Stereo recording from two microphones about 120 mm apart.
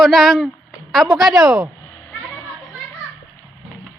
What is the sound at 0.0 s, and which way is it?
A woman's voice, centre (ahead or behind).